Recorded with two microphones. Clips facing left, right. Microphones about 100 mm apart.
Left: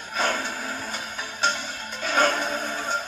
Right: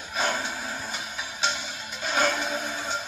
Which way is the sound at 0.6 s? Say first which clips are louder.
Left 2 dB; 50° left (ahead or behind).